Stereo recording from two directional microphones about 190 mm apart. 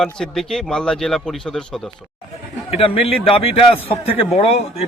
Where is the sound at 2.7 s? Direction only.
30° left (ahead or behind).